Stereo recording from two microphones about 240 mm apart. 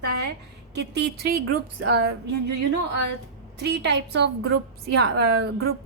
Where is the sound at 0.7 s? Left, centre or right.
Right.